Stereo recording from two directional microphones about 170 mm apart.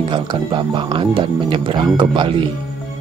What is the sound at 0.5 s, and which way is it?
Speech, 30° right (ahead or behind).